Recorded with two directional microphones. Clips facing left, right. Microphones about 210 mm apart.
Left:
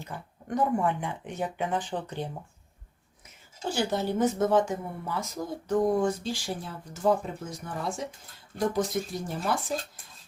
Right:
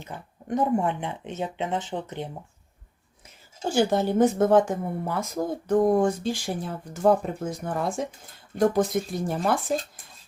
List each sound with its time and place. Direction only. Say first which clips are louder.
0.0 s speech: right 1 dB; 20° right (ahead or behind)
3.6 s speech: right 6 dB; 50° right (ahead or behind)